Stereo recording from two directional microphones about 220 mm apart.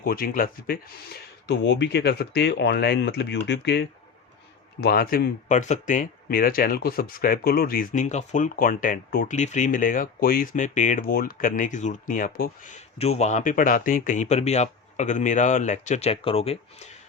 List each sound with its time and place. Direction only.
0.0 s speech: 40° left (ahead or behind)